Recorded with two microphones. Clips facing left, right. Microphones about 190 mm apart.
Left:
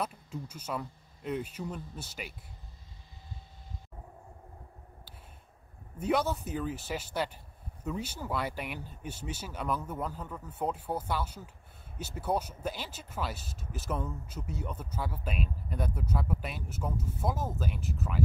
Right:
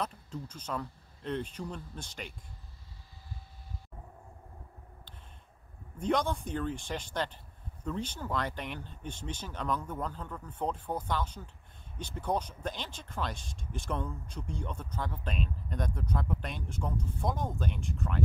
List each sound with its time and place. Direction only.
0.0 s speech: 10° left (ahead or behind)
5.9 s speech: 5° left (ahead or behind)